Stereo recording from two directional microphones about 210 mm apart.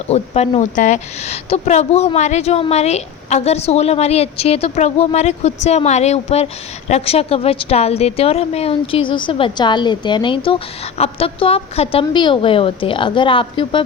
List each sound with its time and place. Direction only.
0.1 s a woman's voice: 30° left (ahead or behind)